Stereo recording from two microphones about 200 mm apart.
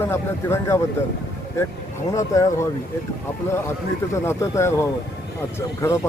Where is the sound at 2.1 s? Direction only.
15° left (ahead or behind).